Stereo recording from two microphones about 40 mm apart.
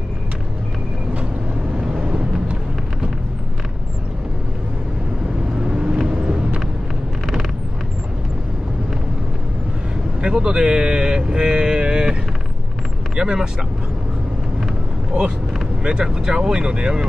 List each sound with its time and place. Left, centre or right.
1.8 s vehicle: centre
5.7 s vehicle: right
10.2 s a sound: right
13.1 s speech: centre
15.1 s speech: right